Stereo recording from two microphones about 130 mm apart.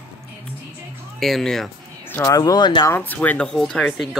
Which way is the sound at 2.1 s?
25° left (ahead or behind).